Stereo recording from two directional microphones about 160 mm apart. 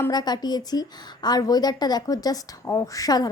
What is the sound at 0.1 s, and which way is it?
A woman's voice, 25° left (ahead or behind).